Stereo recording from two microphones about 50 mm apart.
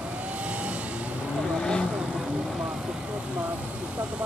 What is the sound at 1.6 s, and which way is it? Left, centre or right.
Vehicle, centre.